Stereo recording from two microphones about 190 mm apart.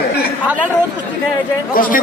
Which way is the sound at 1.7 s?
45° left (ahead or behind).